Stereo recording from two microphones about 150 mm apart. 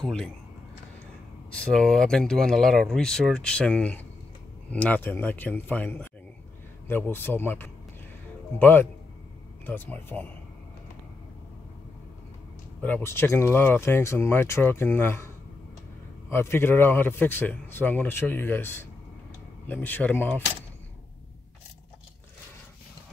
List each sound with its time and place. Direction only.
0.0 s speech: 5° left (ahead or behind)
1.5 s a man's voice: 5° left (ahead or behind)
12.8 s a man's voice: 15° left (ahead or behind)